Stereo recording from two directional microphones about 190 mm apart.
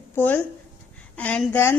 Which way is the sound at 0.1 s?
10° left (ahead or behind).